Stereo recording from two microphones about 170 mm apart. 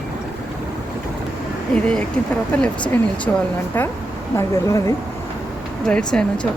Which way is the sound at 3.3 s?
10° left (ahead or behind).